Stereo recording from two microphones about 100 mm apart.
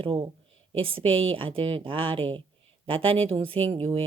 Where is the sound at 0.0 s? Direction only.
65° right (ahead or behind).